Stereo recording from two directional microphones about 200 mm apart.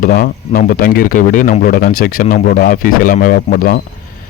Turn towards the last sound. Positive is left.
turn(degrees=45)  # may be behind; listen again after turning